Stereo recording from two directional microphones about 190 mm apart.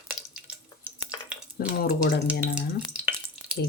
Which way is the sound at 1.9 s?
55° left (ahead or behind).